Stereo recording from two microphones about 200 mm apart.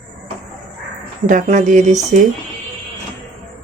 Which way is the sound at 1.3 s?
40° right (ahead or behind).